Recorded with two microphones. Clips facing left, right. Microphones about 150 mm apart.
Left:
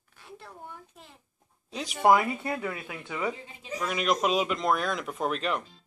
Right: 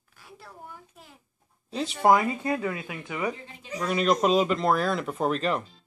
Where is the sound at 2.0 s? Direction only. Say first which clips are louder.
Right 1 dB; 20° right (ahead or behind).